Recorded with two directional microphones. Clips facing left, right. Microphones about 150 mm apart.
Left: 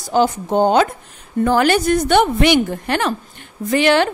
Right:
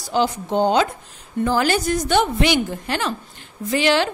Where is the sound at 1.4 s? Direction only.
65° left (ahead or behind).